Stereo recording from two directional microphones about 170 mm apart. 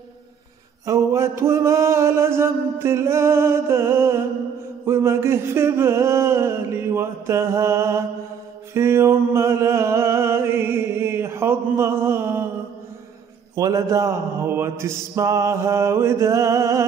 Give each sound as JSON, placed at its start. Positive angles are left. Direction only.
{"t": 0.8, "sound": "mantra", "side_deg": -15}
{"t": 8.7, "sound": "a sound", "side_deg": -15}
{"t": 13.6, "sound": "mantra", "side_deg": -20}